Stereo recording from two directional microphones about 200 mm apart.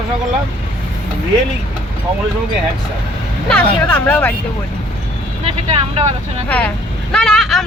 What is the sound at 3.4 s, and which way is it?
Speech, 5° left (ahead or behind).